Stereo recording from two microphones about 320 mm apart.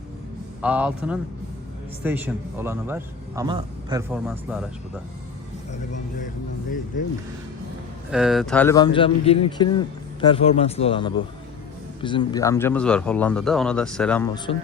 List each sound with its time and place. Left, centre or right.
0.6 s a man's voice: centre
4.3 s speech: centre
5.9 s music: left
8.1 s a man's voice: centre